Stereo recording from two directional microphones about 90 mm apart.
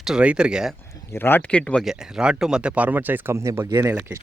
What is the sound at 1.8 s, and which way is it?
Speech, 5° right (ahead or behind).